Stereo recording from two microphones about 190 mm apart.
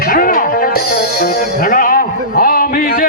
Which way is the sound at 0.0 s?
50° left (ahead or behind).